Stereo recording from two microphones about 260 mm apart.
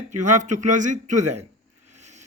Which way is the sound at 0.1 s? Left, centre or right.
Right.